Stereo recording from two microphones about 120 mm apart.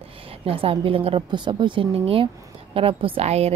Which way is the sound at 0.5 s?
50° right (ahead or behind).